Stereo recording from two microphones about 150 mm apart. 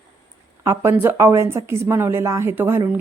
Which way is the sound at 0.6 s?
15° right (ahead or behind).